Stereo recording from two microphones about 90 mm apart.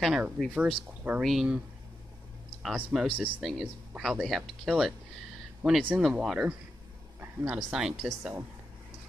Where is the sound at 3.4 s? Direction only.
Centre (ahead or behind).